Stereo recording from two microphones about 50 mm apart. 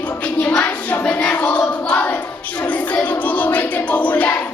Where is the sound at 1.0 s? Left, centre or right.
Left.